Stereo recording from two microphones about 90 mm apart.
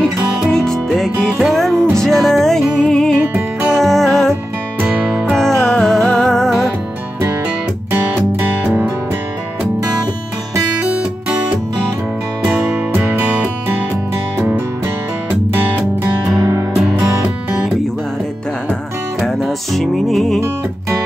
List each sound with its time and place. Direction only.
0.0 s music: 5° left (ahead or behind)
10.8 s music: 15° right (ahead or behind)
12.4 s music: 20° right (ahead or behind)
16.3 s music: 35° right (ahead or behind)
19.2 s music: centre (ahead or behind)